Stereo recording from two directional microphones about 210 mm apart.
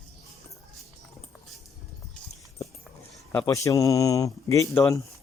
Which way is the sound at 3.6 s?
15° left (ahead or behind).